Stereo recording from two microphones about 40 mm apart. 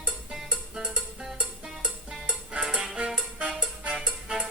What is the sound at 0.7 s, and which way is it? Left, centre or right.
Music, right.